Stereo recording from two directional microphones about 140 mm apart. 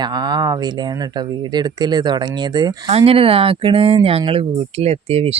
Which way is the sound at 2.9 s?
40° right (ahead or behind).